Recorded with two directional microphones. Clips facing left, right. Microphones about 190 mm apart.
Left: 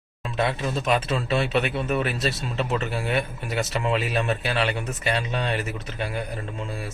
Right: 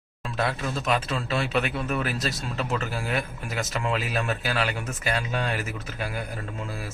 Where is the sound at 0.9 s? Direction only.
Centre (ahead or behind).